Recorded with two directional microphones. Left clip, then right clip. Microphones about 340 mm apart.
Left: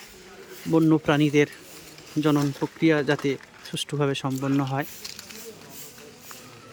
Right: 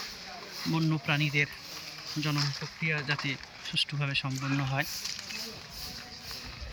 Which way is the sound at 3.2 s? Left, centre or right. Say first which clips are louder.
Left 7 dB; left.